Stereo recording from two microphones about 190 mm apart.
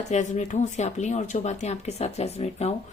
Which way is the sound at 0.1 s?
40° left (ahead or behind).